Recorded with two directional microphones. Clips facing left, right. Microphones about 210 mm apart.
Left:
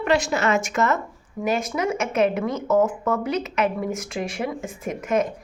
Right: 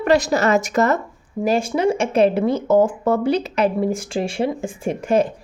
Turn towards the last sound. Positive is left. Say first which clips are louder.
# right 5 dB
turn(degrees=-30)  # may be behind; listen again after turning